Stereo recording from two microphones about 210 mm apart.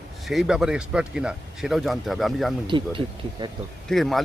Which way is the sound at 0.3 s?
Centre (ahead or behind).